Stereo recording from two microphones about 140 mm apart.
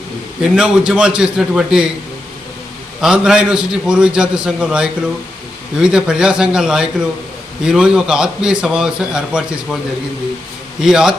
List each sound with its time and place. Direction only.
0.5 s a man's voice: 5° right (ahead or behind)
3.0 s a man's voice: 5° right (ahead or behind)
10.8 s a man's voice: 5° right (ahead or behind)